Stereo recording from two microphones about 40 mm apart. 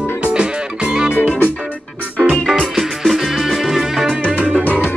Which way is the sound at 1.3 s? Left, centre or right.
Left.